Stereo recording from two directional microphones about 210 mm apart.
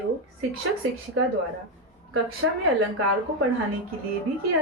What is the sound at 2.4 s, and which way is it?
Speech, 70° right (ahead or behind).